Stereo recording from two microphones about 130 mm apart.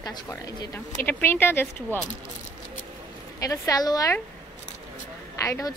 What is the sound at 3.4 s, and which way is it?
Speech, 25° left (ahead or behind).